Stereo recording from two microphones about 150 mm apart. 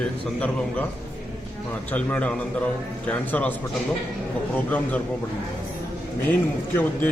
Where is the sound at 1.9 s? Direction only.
10° left (ahead or behind).